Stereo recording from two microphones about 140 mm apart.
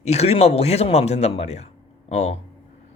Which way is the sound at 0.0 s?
50° left (ahead or behind).